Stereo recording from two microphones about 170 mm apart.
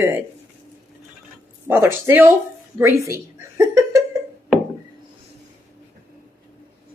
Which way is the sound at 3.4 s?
20° right (ahead or behind).